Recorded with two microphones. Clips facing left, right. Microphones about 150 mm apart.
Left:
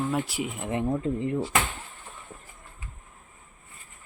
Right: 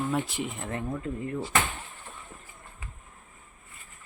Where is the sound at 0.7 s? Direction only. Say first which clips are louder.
Left 6 dB; 20° left (ahead or behind).